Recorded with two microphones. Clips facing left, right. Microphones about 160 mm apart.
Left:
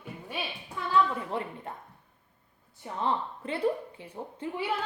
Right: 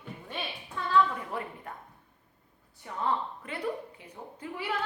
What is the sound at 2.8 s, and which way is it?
A woman's voice, 30° left (ahead or behind).